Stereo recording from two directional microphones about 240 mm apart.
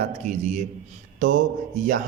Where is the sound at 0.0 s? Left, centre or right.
Right.